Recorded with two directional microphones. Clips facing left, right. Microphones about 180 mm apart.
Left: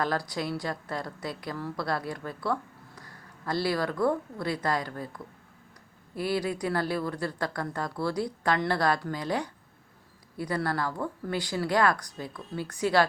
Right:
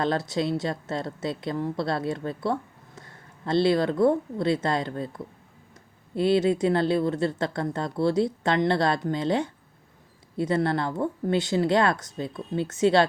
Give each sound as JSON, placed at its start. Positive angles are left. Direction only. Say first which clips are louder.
{"t": 0.0, "sound": "a woman's voice", "louder": "right 4 dB", "side_deg": -25}